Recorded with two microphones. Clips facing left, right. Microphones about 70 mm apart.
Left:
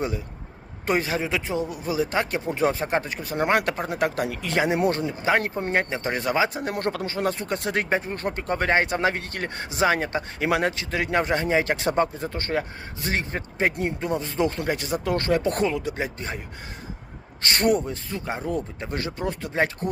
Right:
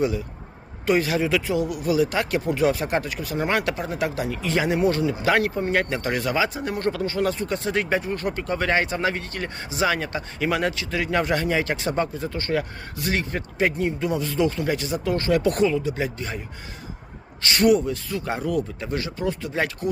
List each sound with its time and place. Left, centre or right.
0.9 s speech: left
3.3 s speech: left
5.7 s speech: left
6.2 s speech: left
6.7 s speech: left
13.7 s speech: left
17.4 s speech: left
18.9 s speech: left